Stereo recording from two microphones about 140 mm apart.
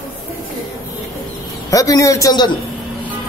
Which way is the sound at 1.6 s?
25° left (ahead or behind).